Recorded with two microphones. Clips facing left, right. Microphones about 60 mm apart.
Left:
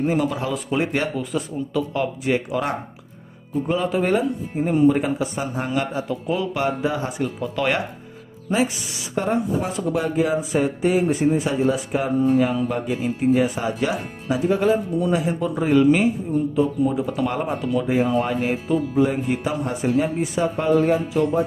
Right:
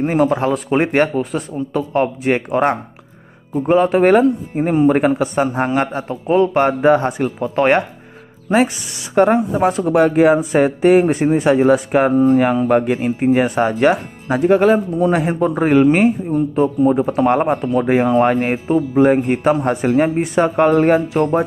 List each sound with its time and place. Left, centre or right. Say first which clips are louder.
0.0 s speech: right 6 dB; right
9.1 s speech: right 8 dB; right
17.8 s speech: right 8 dB; right